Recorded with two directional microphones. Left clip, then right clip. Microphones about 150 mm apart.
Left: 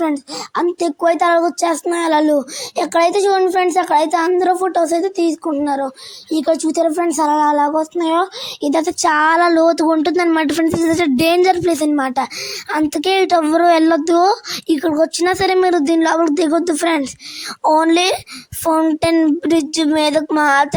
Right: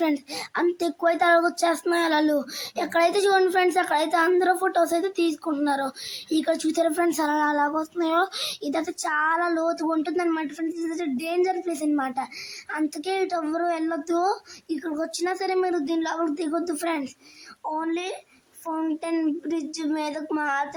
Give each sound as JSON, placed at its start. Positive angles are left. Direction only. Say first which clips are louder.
{"t": 0.5, "sound": "a child's voice", "louder": "left 7 dB", "side_deg": 35}
{"t": 17.6, "sound": "a woman's voice", "louder": "left 16 dB", "side_deg": 90}
{"t": 18.6, "sound": "a woman's voice", "louder": "left 14 dB", "side_deg": 65}
{"t": 19.4, "sound": "speech", "louder": "left 13 dB", "side_deg": 75}